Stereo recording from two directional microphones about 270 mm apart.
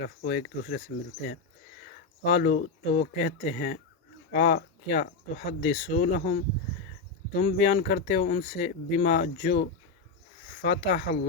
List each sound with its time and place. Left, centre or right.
0.0 s speech: left
2.2 s speech: left